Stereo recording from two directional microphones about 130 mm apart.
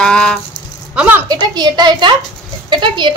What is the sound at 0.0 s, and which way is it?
Rattle, 5° left (ahead or behind).